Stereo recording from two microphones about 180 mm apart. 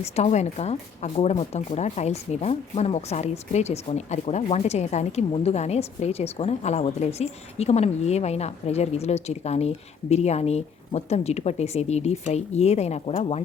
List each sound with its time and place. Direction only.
0.0 s speech: 40° left (ahead or behind)